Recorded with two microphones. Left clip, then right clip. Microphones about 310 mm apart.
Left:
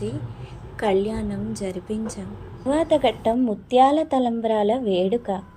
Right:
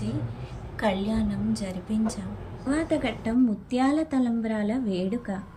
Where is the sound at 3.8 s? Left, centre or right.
Centre.